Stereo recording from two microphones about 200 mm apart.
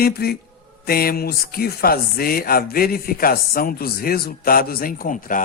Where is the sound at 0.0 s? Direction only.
50° left (ahead or behind).